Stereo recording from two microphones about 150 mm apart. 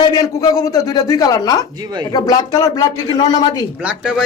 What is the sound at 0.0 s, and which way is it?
A woman's voice, 25° left (ahead or behind).